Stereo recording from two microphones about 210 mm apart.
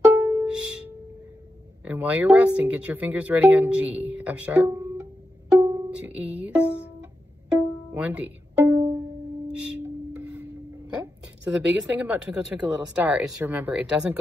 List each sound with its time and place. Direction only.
0.1 s music: 10° right (ahead or behind)
1.9 s speech: 5° right (ahead or behind)
5.6 s pizzicato: 10° right (ahead or behind)
9.5 s music: 5° right (ahead or behind)
11.5 s a woman's voice: 5° right (ahead or behind)